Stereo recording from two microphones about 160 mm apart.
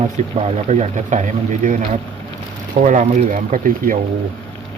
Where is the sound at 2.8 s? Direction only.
50° right (ahead or behind).